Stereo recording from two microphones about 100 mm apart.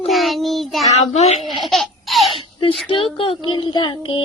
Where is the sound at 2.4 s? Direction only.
60° left (ahead or behind).